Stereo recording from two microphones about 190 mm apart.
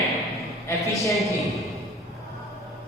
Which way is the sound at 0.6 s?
15° left (ahead or behind).